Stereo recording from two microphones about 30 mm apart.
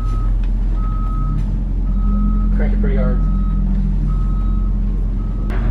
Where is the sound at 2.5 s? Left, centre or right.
Centre.